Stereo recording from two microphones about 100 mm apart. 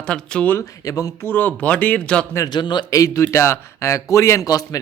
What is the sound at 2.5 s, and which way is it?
Speech, 50° left (ahead or behind).